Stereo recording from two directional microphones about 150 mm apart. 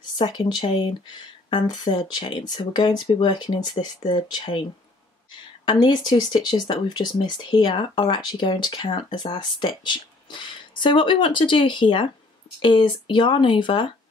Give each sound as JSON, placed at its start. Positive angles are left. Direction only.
{"t": 0.2, "sound": "speech", "side_deg": 30}
{"t": 5.7, "sound": "speech", "side_deg": 30}